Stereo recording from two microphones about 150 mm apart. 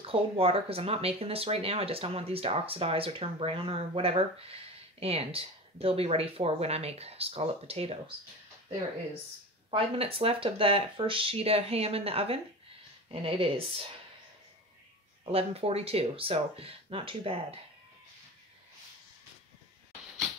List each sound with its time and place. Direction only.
0.0 s speech: 40° right (ahead or behind)
9.7 s speech: 40° right (ahead or behind)
15.3 s speech: 40° right (ahead or behind)